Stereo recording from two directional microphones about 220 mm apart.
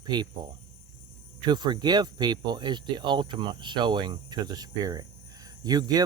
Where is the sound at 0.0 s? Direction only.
20° right (ahead or behind).